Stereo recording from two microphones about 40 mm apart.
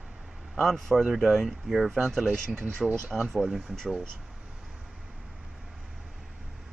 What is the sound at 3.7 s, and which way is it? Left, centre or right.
Speech, centre.